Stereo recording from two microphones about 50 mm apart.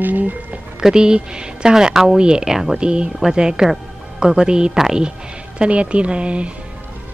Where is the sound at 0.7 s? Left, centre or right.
Centre.